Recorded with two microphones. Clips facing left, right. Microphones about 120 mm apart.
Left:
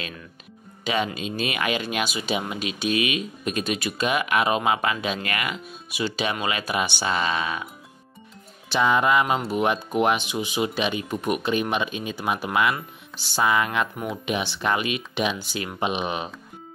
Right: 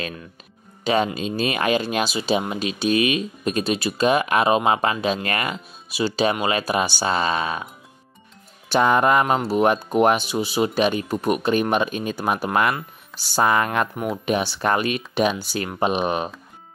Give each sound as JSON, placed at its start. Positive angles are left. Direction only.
{"t": 0.8, "sound": "speech", "side_deg": -40}
{"t": 8.6, "sound": "speech", "side_deg": -50}